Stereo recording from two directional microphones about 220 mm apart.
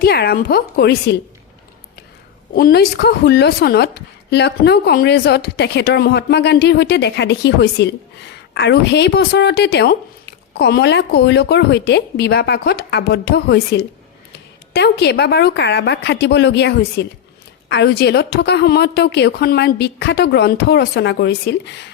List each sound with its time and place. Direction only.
0.0 s a woman's voice: 45° left (ahead or behind)
2.6 s a woman's voice: 45° left (ahead or behind)